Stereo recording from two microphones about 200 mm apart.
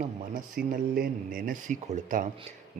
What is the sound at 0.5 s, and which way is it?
Speech, 45° right (ahead or behind).